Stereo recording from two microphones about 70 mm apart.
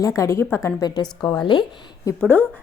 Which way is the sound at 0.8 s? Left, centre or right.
Left.